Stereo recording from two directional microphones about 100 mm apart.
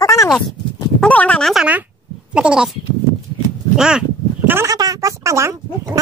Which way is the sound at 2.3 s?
10° right (ahead or behind).